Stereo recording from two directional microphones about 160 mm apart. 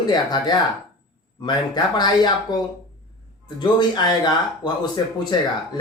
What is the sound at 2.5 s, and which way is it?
Speech, 25° left (ahead or behind).